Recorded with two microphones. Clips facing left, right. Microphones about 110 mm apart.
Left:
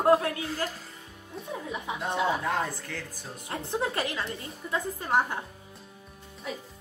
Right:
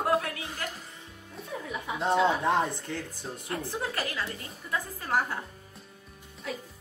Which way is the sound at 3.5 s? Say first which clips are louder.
Left 3 dB; 25° left (ahead or behind).